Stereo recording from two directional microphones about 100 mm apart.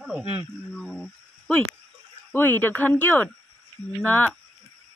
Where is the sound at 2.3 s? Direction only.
20° left (ahead or behind).